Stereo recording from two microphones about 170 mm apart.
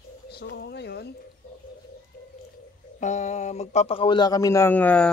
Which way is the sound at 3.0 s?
45° left (ahead or behind).